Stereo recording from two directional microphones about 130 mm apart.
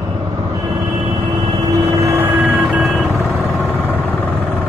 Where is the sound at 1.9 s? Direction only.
20° right (ahead or behind).